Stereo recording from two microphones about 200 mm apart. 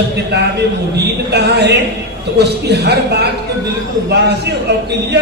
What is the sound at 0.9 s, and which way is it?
A man's voice, 55° right (ahead or behind).